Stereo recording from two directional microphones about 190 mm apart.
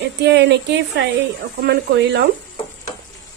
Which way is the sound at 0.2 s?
65° right (ahead or behind).